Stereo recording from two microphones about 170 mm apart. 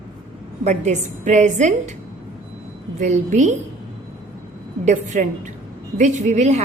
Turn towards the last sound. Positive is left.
turn(degrees=-40)  # may be behind; listen again after turning